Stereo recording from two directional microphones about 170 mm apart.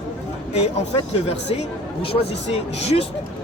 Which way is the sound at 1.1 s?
35° left (ahead or behind).